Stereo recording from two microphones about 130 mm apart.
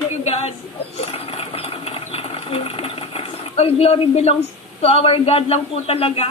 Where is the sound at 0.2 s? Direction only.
55° left (ahead or behind).